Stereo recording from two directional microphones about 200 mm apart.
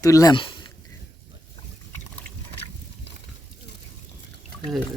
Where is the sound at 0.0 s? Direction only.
15° left (ahead or behind).